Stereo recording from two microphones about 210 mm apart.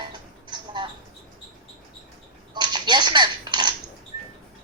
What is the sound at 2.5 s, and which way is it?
Speech, 20° right (ahead or behind).